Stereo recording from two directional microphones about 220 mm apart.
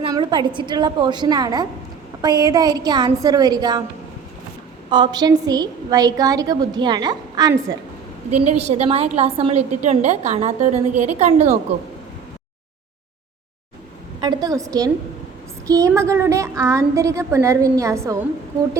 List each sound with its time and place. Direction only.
0.0 s a woman's voice: 20° right (ahead or behind)
4.9 s a woman's voice: 20° right (ahead or behind)
8.4 s a woman's voice: 30° right (ahead or behind)
10.9 s a woman's voice: 90° right
11.2 s a woman's voice: 30° right (ahead or behind)
14.2 s a woman's voice: 20° right (ahead or behind)